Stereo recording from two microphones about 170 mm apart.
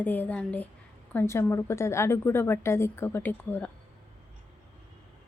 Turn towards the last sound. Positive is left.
turn(degrees=10)  # may be behind; listen again after turning